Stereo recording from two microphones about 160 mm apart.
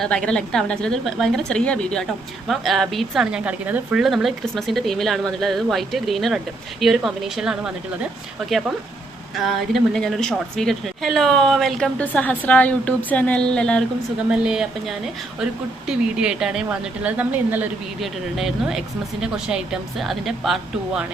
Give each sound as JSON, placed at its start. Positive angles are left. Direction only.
{"t": 0.0, "sound": "a woman's voice", "side_deg": 5}
{"t": 14.3, "sound": "a woman's voice", "side_deg": -5}